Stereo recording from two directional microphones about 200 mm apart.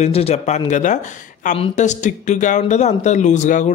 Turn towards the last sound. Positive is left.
turn(degrees=40)  # may be behind; listen again after turning